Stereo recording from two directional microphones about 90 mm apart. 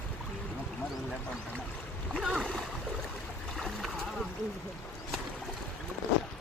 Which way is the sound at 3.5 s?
Centre (ahead or behind).